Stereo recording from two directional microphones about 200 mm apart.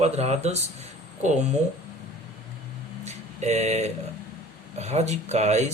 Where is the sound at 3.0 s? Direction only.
35° right (ahead or behind).